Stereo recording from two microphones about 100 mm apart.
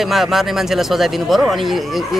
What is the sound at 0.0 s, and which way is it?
Speech, centre (ahead or behind).